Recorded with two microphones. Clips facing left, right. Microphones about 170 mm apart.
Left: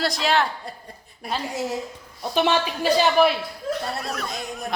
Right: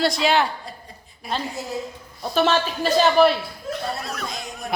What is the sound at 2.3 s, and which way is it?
A woman's voice, 15° left (ahead or behind).